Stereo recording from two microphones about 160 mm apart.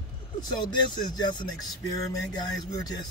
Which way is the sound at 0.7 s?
25° left (ahead or behind).